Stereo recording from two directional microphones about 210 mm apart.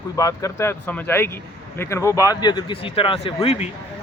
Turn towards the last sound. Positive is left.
turn(degrees=30)  # may be behind; listen again after turning